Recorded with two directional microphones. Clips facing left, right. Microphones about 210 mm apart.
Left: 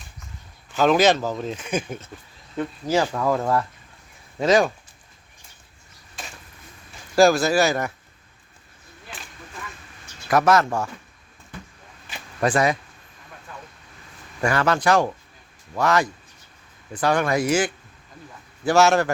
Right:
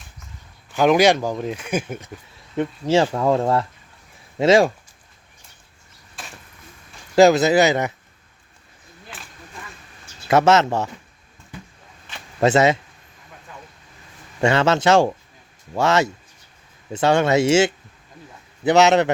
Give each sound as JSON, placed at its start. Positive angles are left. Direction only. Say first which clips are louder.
{"t": 0.8, "sound": "speech", "louder": "right 2 dB", "side_deg": -10}
{"t": 2.6, "sound": "speech", "louder": "right 4 dB", "side_deg": -25}
{"t": 7.2, "sound": "speech", "louder": "right 3 dB", "side_deg": -20}
{"t": 9.1, "sound": "a sound", "louder": "left 1 dB", "side_deg": -5}
{"t": 10.2, "sound": "speech", "louder": "right 3 dB", "side_deg": -25}
{"t": 12.4, "sound": "speech", "louder": "right 4 dB", "side_deg": -25}
{"t": 14.4, "sound": "speech", "louder": "right 3 dB", "side_deg": -25}